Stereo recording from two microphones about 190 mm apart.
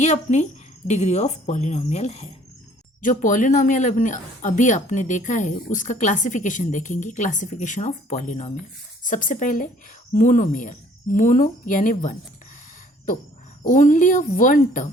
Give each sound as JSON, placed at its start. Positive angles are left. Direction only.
{"t": 0.0, "sound": "a woman's voice", "side_deg": 40}
{"t": 13.7, "sound": "a woman's voice", "side_deg": 45}